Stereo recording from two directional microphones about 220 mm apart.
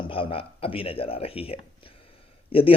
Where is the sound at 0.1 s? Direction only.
25° left (ahead or behind).